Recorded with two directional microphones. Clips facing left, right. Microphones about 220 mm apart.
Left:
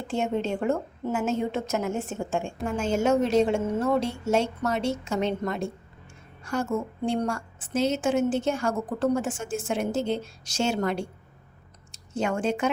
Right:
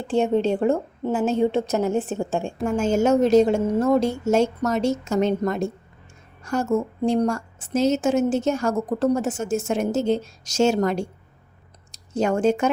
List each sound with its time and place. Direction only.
0.1 s a woman's voice: 35° right (ahead or behind)